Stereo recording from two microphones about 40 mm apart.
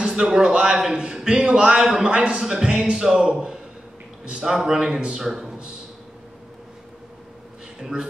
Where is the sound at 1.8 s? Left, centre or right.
Centre.